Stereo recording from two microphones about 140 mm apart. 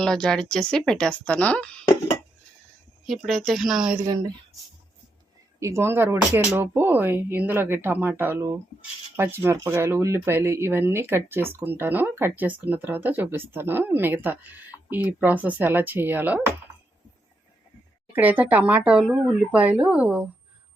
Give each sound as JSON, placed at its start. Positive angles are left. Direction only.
{"t": 0.0, "sound": "a woman's voice", "side_deg": 5}
{"t": 3.1, "sound": "a woman's voice", "side_deg": 0}
{"t": 5.5, "sound": "speech", "side_deg": -20}
{"t": 18.1, "sound": "speech", "side_deg": -10}